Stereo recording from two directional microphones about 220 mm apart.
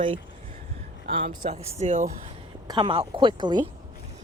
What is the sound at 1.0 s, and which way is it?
Speech, 40° right (ahead or behind).